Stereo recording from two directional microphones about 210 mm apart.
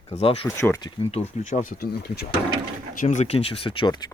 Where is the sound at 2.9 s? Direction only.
40° left (ahead or behind); by 4.1 s 20° left (ahead or behind).